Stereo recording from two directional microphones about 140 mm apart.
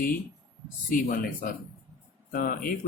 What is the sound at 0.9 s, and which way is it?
Speech, 80° left.